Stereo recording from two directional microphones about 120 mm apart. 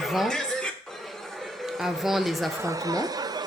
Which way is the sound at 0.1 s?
Centre (ahead or behind).